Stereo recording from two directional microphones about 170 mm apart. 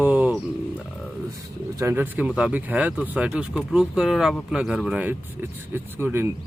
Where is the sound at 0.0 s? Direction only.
10° right (ahead or behind).